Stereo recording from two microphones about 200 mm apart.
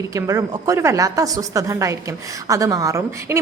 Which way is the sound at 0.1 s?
15° right (ahead or behind).